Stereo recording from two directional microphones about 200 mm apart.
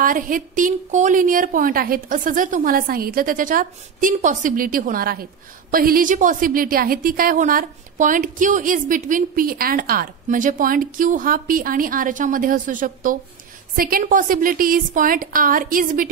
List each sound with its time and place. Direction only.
0.0 s a woman's voice: 45° right (ahead or behind)